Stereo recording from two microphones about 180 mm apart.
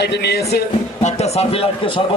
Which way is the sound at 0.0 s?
70° left (ahead or behind).